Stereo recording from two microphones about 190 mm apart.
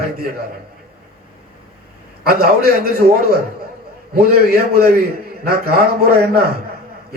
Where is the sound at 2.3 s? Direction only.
55° right (ahead or behind).